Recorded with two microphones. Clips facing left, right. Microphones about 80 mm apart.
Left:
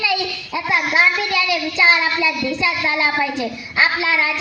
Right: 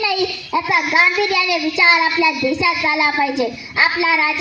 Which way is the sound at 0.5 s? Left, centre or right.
Centre.